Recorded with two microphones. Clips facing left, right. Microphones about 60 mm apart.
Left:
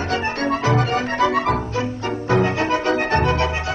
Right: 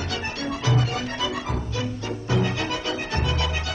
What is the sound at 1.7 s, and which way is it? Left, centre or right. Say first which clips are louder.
Music: left 6 dB; left.